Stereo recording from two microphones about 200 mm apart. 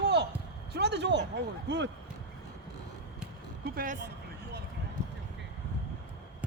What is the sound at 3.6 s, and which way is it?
Speech, 45° right (ahead or behind).